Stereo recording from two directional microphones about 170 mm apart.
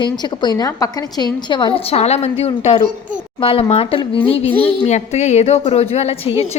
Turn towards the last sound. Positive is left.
turn(degrees=35)  # may be behind; listen again after turning